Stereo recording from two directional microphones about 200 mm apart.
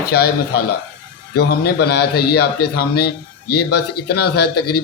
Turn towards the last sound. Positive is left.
turn(degrees=55)  # may be behind; listen again after turning